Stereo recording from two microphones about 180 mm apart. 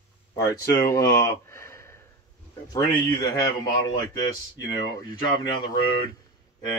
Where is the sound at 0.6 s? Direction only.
20° left (ahead or behind).